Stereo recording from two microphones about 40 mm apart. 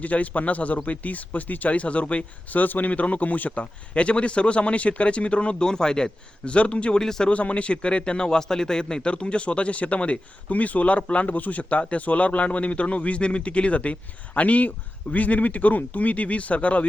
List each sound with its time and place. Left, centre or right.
0.0 s speech: left
2.6 s speech: left
3.6 s speech: left
7.0 s speech: centre
7.3 s speech: left